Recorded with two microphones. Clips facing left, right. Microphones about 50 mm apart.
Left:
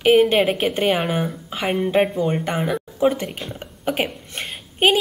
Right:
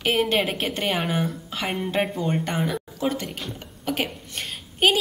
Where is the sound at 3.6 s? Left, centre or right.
Left.